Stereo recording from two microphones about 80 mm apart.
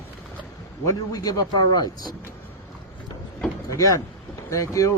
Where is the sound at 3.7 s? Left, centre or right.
Left.